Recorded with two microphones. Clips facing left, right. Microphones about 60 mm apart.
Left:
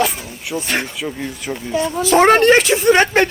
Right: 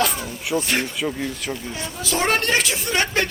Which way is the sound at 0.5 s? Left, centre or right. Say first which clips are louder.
Right 1 dB; centre.